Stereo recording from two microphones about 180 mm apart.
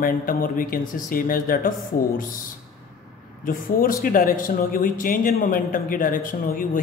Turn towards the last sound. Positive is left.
turn(degrees=50)  # may be behind; listen again after turning